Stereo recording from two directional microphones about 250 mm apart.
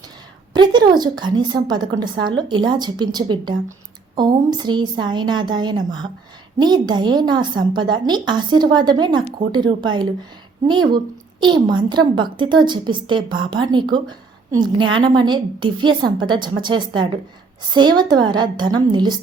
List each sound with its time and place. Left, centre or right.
0.5 s a woman's voice: centre